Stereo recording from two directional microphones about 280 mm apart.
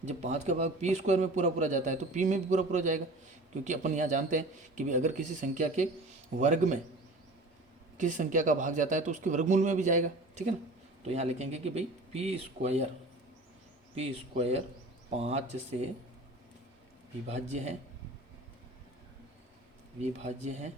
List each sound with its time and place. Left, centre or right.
0.0 s a man's voice: right
7.9 s a man's voice: right
13.9 s a man's voice: right
17.2 s a man's voice: right
20.0 s a man's voice: right